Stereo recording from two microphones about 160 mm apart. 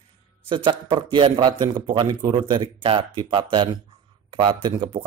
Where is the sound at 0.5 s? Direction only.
30° right (ahead or behind).